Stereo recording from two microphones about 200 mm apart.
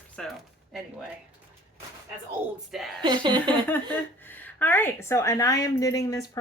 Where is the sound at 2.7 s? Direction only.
Centre (ahead or behind).